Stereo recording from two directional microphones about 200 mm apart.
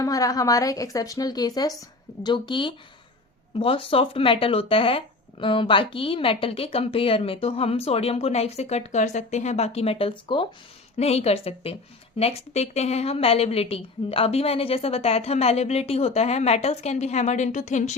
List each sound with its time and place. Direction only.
0.0 s a woman's voice: 15° left (ahead or behind); by 17.9 s 35° left (ahead or behind)